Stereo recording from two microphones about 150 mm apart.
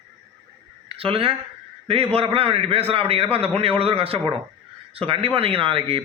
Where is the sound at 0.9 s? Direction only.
40° right (ahead or behind).